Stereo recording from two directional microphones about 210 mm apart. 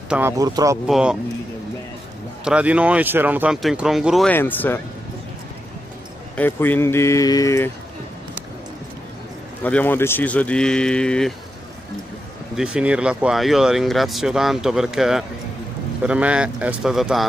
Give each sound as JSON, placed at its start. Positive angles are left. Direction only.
{"t": 0.1, "sound": "speech", "side_deg": -15}
{"t": 0.8, "sound": "speech", "side_deg": -5}
{"t": 2.4, "sound": "speech", "side_deg": -5}
{"t": 6.3, "sound": "speech", "side_deg": 10}
{"t": 9.6, "sound": "speech", "side_deg": 5}
{"t": 12.5, "sound": "speech", "side_deg": -5}